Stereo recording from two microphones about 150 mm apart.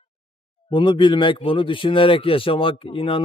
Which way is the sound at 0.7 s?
35° left (ahead or behind).